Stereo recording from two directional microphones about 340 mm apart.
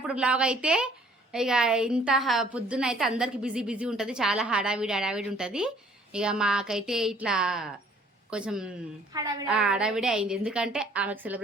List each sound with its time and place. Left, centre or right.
0.1 s a woman's voice: centre